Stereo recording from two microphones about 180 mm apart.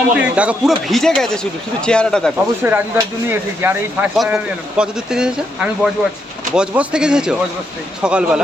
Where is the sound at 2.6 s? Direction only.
10° right (ahead or behind).